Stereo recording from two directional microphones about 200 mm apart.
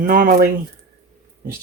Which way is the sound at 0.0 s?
45° right (ahead or behind).